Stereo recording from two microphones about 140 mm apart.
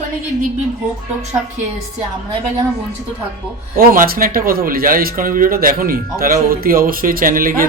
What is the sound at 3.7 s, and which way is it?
Speech, 85° right.